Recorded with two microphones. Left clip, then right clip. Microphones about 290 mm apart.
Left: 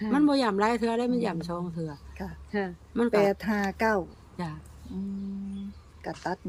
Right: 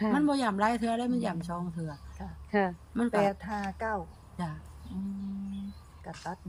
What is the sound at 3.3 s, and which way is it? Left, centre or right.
Speech, left.